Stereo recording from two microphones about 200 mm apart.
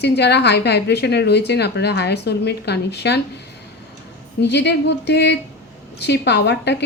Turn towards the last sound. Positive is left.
turn(degrees=60)  # may be behind; listen again after turning